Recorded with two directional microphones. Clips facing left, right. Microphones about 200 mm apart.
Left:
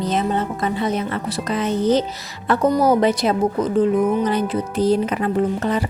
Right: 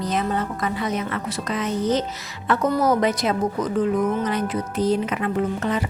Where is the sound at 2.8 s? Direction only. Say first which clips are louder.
Left 4 dB; 30° left (ahead or behind).